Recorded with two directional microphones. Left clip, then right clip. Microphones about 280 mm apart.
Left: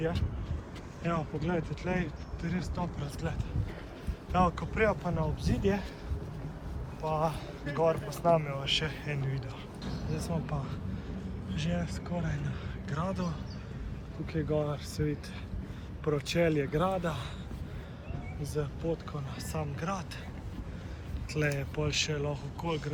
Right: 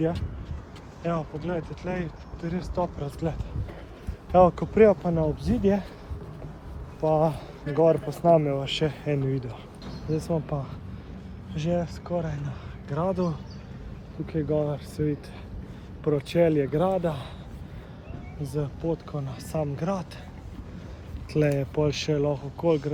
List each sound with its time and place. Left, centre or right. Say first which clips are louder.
1.0 s speech: right 4 dB; centre
4.3 s speech: right 10 dB; right
7.1 s speech: right 8 dB; right
14.3 s speech: right 5 dB; right
18.4 s speech: right 5 dB; right
21.3 s speech: right 8 dB; right